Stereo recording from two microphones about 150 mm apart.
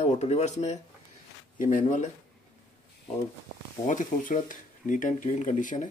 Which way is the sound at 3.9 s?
60° left (ahead or behind).